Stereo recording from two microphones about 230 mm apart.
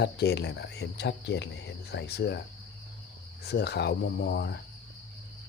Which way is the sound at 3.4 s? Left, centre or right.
Left.